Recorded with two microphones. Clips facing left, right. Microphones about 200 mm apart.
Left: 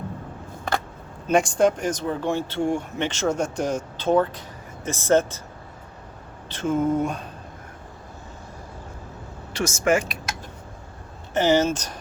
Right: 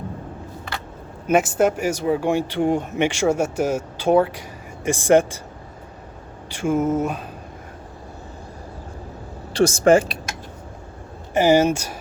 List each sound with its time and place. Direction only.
1.3 s speech: 5° right (ahead or behind)
6.5 s a sound: 10° right (ahead or behind)
9.5 s speech: 35° right (ahead or behind)
11.3 s speech: 10° right (ahead or behind)